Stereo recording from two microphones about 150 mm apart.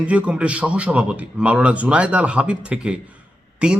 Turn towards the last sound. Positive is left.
turn(degrees=-5)  # may be behind; listen again after turning